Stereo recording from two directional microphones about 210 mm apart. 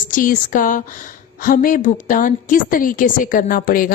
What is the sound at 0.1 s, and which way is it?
A woman's voice, 40° left (ahead or behind).